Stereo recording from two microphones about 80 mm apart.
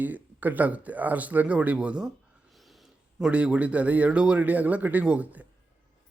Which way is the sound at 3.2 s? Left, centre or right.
Centre.